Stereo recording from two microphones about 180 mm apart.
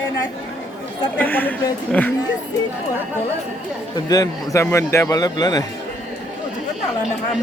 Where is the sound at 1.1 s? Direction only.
10° left (ahead or behind).